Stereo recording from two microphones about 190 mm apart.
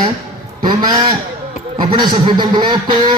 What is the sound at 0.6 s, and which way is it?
A man's voice, 20° right (ahead or behind).